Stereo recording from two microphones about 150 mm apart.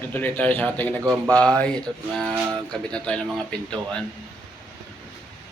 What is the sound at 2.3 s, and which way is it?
Speech, 20° right (ahead or behind).